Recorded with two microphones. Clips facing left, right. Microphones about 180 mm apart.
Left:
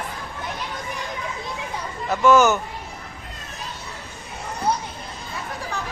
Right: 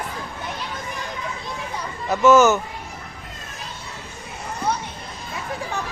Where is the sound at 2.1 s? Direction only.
5° right (ahead or behind).